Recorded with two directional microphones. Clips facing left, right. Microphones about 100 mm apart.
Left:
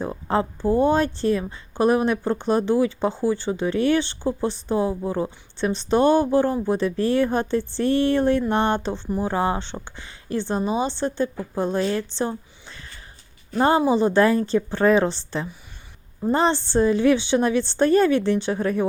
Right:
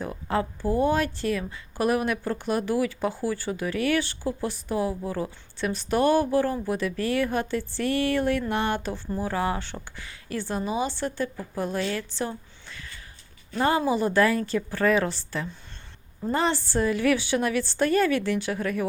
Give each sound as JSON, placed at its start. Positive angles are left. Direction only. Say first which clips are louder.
{"t": 0.0, "sound": "speech", "louder": "left 4 dB", "side_deg": 30}
{"t": 12.1, "sound": "a sound", "louder": "left 5 dB", "side_deg": 30}
{"t": 13.6, "sound": "speech", "louder": "left 5 dB", "side_deg": 30}
{"t": 16.3, "sound": "speech", "louder": "left 5 dB", "side_deg": 30}